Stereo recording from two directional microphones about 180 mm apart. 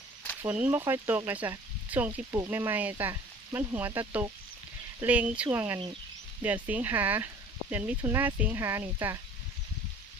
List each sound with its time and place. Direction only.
0.4 s speech: 10° right (ahead or behind)